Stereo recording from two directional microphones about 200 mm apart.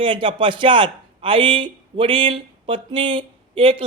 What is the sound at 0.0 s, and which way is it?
A man's voice, 25° right (ahead or behind).